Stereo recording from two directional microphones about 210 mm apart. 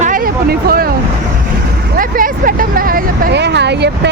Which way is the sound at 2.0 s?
40° right (ahead or behind).